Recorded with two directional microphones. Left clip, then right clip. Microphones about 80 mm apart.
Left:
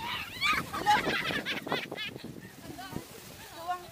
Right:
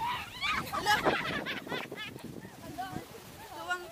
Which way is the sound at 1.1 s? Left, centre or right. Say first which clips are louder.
Left 2 dB; left.